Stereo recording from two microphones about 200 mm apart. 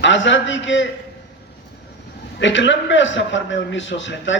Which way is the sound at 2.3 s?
65° left (ahead or behind).